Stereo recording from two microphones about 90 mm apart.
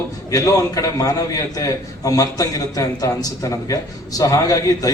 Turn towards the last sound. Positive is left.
turn(degrees=40)  # may be behind; listen again after turning